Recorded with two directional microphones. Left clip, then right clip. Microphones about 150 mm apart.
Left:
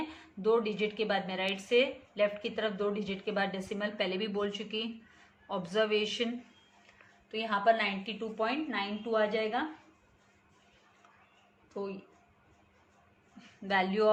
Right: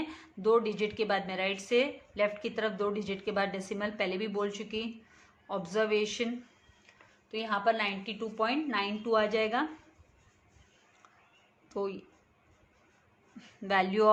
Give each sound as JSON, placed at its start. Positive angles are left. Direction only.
{"t": 0.1, "sound": "a woman's voice", "side_deg": -25}
{"t": 11.7, "sound": "speech", "side_deg": -45}
{"t": 13.4, "sound": "a woman's voice", "side_deg": -30}